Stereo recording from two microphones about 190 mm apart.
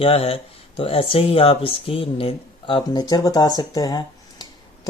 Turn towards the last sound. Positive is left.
turn(degrees=20)  # may be behind; listen again after turning